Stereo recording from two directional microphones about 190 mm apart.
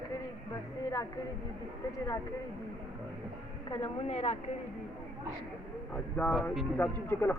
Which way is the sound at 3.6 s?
30° left (ahead or behind).